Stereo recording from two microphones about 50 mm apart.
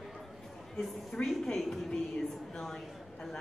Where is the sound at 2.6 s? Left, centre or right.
Centre.